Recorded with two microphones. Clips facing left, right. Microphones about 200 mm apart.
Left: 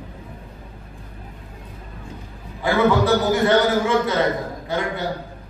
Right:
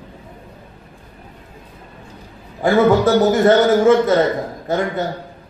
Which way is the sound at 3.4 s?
45° right (ahead or behind).